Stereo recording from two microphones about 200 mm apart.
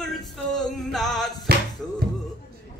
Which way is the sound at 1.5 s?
50° right (ahead or behind).